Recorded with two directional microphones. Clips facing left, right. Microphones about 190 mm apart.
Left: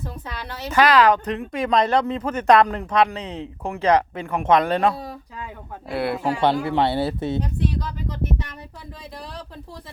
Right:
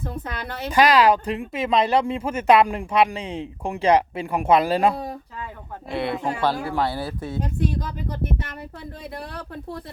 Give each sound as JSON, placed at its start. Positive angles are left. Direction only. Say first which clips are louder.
{"t": 0.3, "sound": "speech", "louder": "right 2 dB", "side_deg": -50}
{"t": 0.7, "sound": "speech", "louder": "even", "side_deg": -10}
{"t": 5.9, "sound": "speech", "louder": "left 1 dB", "side_deg": 5}
{"t": 6.4, "sound": "speech", "louder": "left 4 dB", "side_deg": 25}
{"t": 7.4, "sound": "speech", "louder": "even", "side_deg": -50}